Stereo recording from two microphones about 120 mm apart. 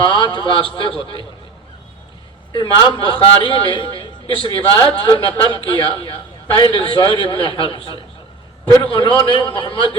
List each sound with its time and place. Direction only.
0.0 s a man's voice: 40° left (ahead or behind)
2.5 s a man's voice: 40° left (ahead or behind)